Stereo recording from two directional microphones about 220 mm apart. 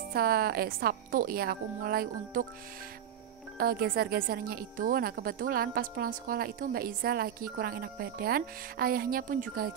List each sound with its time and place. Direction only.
0.1 s speech: 45° right (ahead or behind)
3.5 s speech: 40° right (ahead or behind)